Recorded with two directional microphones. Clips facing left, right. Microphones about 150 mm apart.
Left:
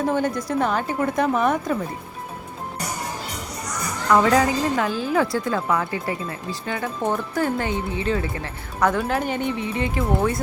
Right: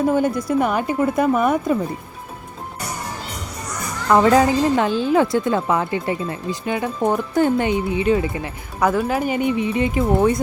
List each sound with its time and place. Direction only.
0.1 s a woman's voice: 10° right (ahead or behind)
4.1 s a woman's voice: 25° right (ahead or behind)